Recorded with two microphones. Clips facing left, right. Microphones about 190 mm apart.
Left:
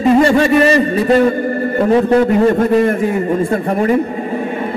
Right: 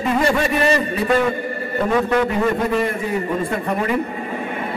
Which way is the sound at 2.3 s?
50° left (ahead or behind).